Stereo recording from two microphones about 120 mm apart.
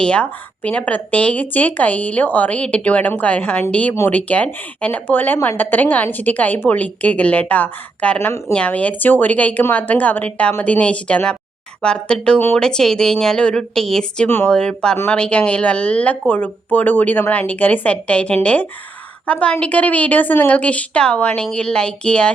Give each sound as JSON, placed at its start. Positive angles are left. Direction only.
{"t": 0.0, "sound": "a woman's voice", "side_deg": 10}
{"t": 14.3, "sound": "speech", "side_deg": 20}
{"t": 14.5, "sound": "speech", "side_deg": 5}